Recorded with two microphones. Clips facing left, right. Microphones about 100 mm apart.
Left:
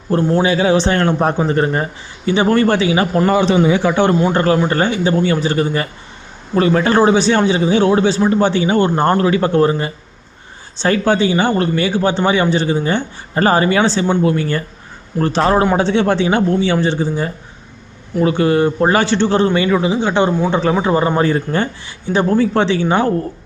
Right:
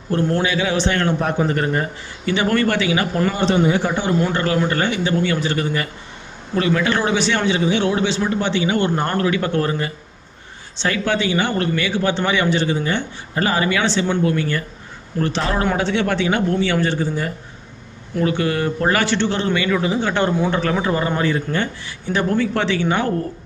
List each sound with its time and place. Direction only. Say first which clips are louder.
0.1 s a man's voice: left 5 dB; 35° left (ahead or behind)
3.8 s speech: left 7 dB; 75° left (ahead or behind)
4.3 s a man's voice: left 5 dB; 40° left (ahead or behind)
10.8 s a man's voice: left 6 dB; 35° left (ahead or behind)
19.8 s a man's voice: left 4 dB; 20° left (ahead or behind)